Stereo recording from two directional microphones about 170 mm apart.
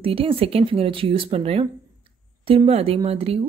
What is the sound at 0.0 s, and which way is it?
Speech, 35° right (ahead or behind).